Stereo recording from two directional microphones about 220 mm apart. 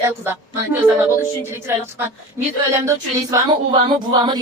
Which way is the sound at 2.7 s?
15° right (ahead or behind).